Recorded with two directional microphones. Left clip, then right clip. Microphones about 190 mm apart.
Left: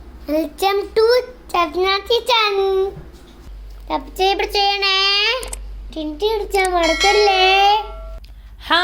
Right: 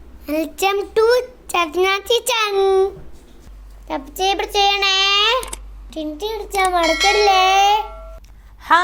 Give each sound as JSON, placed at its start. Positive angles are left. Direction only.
{"t": 0.3, "sound": "child singing", "side_deg": -15}
{"t": 4.2, "sound": "a child's voice", "side_deg": -15}